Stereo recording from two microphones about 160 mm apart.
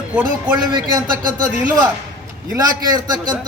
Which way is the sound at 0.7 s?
25° right (ahead or behind).